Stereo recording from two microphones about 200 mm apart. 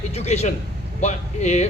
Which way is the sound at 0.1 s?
30° left (ahead or behind).